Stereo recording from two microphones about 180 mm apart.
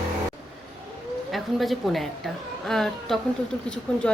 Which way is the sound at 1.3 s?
Centre (ahead or behind).